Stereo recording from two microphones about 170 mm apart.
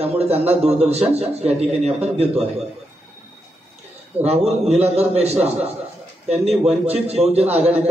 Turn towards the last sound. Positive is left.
turn(degrees=-40)  # may be behind; listen again after turning